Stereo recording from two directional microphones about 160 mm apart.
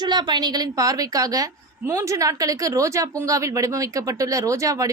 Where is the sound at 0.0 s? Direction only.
25° right (ahead or behind).